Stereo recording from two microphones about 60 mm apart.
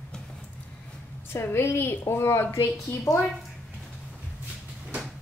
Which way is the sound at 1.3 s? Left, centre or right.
Left.